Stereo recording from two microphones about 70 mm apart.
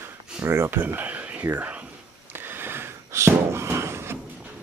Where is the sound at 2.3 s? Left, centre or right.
Right.